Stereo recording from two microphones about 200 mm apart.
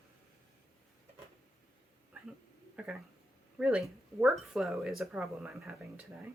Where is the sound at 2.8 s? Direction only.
5° right (ahead or behind).